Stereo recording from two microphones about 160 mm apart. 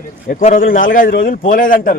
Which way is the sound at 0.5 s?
60° left (ahead or behind).